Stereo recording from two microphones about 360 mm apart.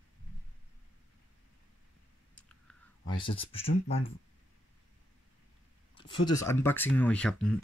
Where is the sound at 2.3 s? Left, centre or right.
Centre.